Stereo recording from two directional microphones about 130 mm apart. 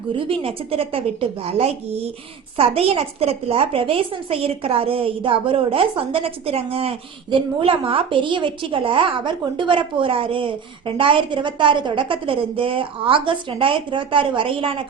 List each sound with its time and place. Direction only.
0.1 s a woman's voice: 45° right (ahead or behind)